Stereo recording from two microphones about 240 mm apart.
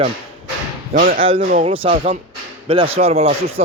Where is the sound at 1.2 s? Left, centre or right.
Right.